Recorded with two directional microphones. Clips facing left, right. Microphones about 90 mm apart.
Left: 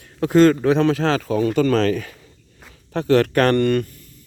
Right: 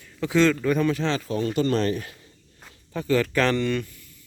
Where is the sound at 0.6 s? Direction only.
90° left.